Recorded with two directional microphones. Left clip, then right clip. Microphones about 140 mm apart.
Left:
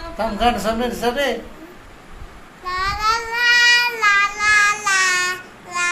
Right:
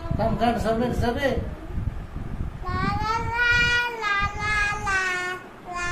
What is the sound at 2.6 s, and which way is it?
Child singing, 5° right (ahead or behind).